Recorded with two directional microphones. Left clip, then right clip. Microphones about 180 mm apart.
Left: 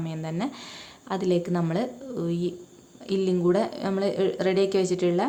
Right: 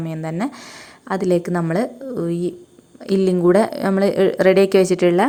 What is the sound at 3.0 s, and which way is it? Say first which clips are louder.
A woman's voice: right 8 dB; 50° right (ahead or behind).